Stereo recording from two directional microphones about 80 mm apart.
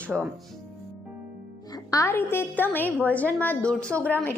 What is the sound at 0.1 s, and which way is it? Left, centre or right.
Speech, centre.